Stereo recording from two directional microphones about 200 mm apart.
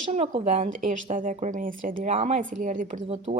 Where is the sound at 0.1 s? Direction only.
35° right (ahead or behind).